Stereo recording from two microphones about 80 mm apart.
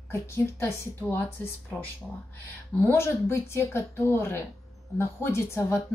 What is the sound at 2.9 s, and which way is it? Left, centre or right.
Speech, left.